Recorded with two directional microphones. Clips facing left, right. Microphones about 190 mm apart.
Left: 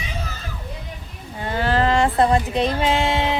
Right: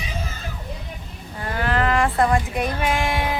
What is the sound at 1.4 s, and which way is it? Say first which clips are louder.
Speech: left 2 dB; 25° left (ahead or behind).